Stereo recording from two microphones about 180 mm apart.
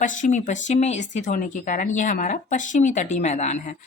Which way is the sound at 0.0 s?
45° left (ahead or behind).